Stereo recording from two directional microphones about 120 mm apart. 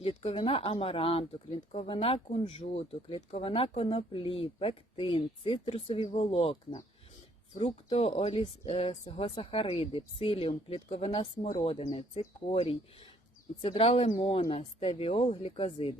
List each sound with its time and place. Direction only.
0.2 s speech: 55° left (ahead or behind)